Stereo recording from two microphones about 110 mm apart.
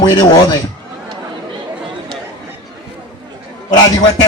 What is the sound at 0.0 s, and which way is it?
Speech, 45° left (ahead or behind).